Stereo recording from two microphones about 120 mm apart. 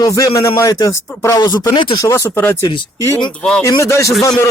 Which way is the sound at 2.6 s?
45° left (ahead or behind).